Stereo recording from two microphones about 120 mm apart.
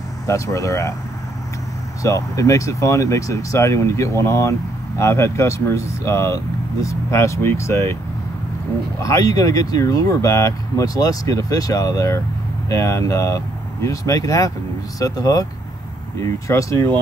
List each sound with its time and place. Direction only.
0.3 s speech: 25° left (ahead or behind)
2.0 s speech: 25° left (ahead or behind)
9.0 s speech: 30° left (ahead or behind)